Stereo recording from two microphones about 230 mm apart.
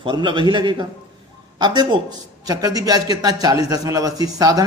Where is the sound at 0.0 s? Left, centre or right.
Right.